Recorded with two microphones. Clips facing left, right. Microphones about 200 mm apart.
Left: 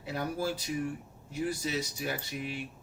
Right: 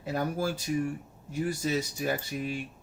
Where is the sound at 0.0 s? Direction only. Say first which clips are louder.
Right 3 dB; 45° right (ahead or behind).